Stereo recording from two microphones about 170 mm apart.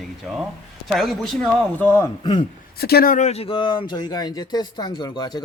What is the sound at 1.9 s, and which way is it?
Speech, 15° left (ahead or behind).